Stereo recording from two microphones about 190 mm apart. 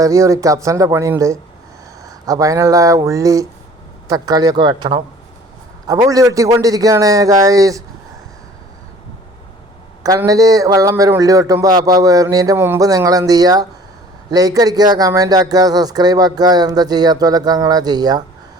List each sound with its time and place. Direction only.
0.0 s a man's voice: 15° right (ahead or behind)
5.9 s a man's voice: 20° right (ahead or behind)
10.0 s speech: 20° right (ahead or behind)